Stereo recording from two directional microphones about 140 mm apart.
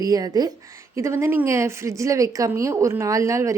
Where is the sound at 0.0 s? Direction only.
25° right (ahead or behind).